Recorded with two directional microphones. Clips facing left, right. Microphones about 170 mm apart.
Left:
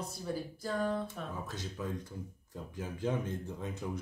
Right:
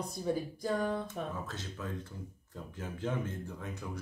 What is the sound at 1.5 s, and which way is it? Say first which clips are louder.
Speech: left 2 dB; 10° left (ahead or behind).